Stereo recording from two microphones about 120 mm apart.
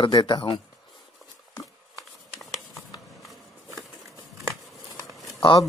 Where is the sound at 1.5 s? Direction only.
30° left (ahead or behind).